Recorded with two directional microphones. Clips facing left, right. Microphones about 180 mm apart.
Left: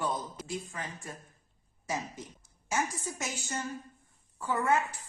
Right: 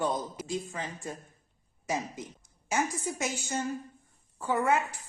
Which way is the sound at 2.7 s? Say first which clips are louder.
Right 3 dB; 20° right (ahead or behind).